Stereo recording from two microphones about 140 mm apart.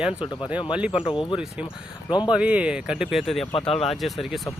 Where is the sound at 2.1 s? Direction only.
30° left (ahead or behind).